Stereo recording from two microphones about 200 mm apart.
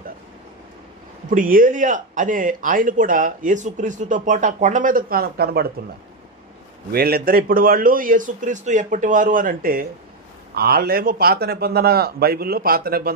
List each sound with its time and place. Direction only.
1.3 s speech: 45° right (ahead or behind)
6.9 s a man's voice: 50° right (ahead or behind)